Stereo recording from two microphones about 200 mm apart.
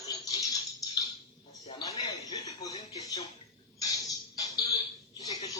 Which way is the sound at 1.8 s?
15° left (ahead or behind).